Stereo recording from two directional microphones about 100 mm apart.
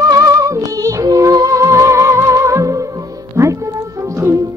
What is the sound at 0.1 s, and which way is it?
Music, 35° right (ahead or behind).